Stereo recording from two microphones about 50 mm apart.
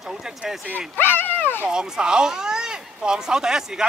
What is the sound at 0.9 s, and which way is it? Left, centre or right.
Speech, left.